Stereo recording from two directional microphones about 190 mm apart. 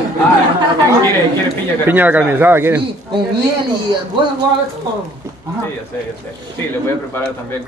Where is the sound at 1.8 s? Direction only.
10° right (ahead or behind).